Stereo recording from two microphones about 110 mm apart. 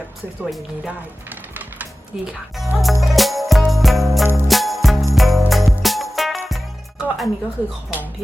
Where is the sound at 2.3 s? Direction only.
Centre (ahead or behind).